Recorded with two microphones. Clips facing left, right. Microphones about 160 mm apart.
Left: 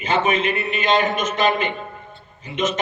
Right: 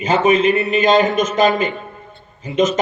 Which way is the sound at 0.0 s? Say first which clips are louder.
Right 6 dB; 40° right (ahead or behind).